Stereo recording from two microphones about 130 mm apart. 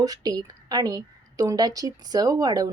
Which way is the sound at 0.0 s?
30° right (ahead or behind).